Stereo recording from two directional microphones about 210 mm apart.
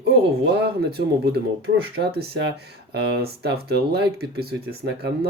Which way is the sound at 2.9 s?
50° right (ahead or behind).